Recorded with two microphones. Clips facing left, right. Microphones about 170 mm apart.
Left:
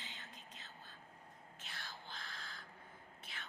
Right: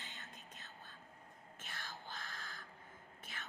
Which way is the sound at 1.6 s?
50° right (ahead or behind).